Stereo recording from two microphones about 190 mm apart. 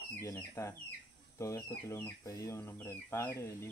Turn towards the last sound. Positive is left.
turn(degrees=10)  # may be behind; listen again after turning